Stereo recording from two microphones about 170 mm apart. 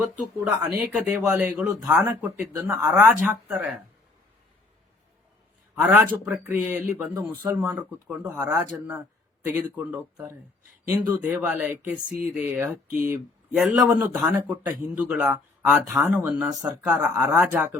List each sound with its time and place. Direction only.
0.3 s speech: 5° right (ahead or behind)
5.7 s a man's voice: 15° right (ahead or behind)
13.7 s speech: 15° right (ahead or behind)
16.5 s speech: 20° right (ahead or behind)
17.0 s speech: 10° right (ahead or behind)